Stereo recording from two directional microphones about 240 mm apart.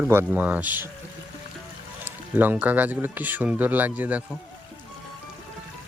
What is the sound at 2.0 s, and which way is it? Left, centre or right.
Speech, centre.